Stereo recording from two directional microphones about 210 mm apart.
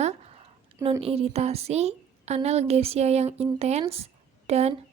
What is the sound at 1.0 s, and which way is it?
Speech, 30° right (ahead or behind).